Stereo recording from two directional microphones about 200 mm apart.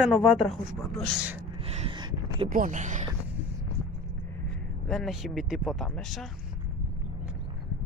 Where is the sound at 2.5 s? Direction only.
40° right (ahead or behind).